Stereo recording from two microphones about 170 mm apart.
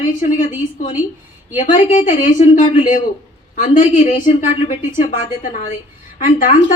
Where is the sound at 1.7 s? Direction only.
50° left (ahead or behind).